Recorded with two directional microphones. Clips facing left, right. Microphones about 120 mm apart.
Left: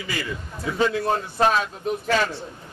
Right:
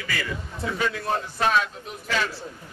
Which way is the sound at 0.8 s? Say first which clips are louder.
Left 6 dB; 25° left (ahead or behind).